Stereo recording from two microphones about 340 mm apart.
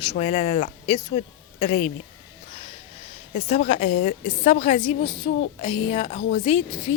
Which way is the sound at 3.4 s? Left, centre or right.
Centre.